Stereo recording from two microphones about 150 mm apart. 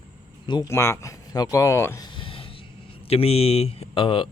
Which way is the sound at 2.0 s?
35° left (ahead or behind).